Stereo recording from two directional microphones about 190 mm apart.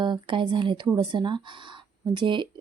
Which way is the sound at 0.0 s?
25° right (ahead or behind).